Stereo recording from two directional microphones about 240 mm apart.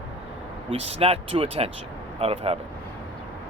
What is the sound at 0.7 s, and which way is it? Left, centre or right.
Speech, right.